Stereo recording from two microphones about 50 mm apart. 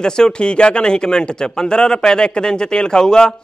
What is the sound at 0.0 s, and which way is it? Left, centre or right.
A man's voice, centre.